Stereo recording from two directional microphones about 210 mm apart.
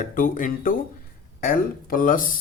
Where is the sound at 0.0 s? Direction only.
40° left (ahead or behind).